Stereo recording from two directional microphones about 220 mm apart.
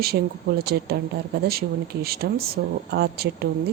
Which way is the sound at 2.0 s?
45° right (ahead or behind).